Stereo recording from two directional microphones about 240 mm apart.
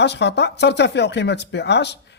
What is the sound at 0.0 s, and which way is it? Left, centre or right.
Speech, left.